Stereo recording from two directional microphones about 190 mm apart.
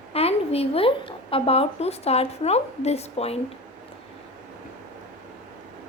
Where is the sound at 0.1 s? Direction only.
30° left (ahead or behind).